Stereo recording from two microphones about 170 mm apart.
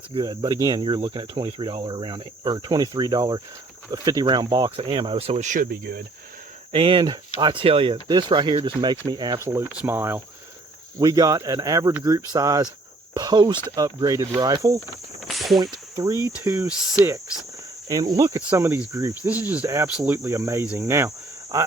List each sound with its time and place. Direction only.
0.1 s speech: 25° right (ahead or behind); by 6.1 s 60° right (ahead or behind)
6.7 s speech: 30° right (ahead or behind)
9.4 s cricket: 15° right (ahead or behind)
10.9 s speech: 20° right (ahead or behind)
15.3 s a sound: centre (ahead or behind)
15.5 s speech: 20° right (ahead or behind)
16.4 s cricket: 15° right (ahead or behind)
16.6 s speech: centre (ahead or behind)
17.8 s speech: 20° right (ahead or behind)
18.9 s cricket: 15° right (ahead or behind)